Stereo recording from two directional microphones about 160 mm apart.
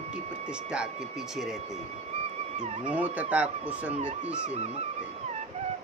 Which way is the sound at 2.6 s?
40° right (ahead or behind).